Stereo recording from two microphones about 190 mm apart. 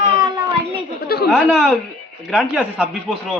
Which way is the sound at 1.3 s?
Centre (ahead or behind).